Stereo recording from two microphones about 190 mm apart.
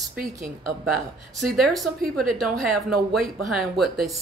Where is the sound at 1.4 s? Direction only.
Centre (ahead or behind).